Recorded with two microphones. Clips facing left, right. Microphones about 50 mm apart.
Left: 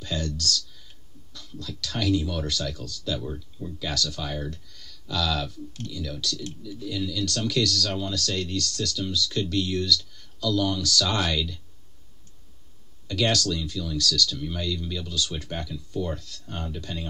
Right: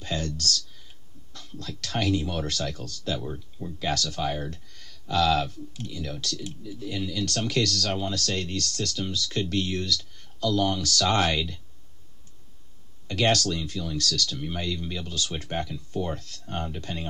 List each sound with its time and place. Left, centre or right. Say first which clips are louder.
0.0 s a sound: even; right
1.3 s speech: even; right
3.3 s speech: even; right
13.0 s speech: right 1 dB; right